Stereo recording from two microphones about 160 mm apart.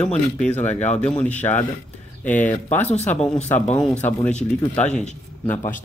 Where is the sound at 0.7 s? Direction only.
45° left (ahead or behind).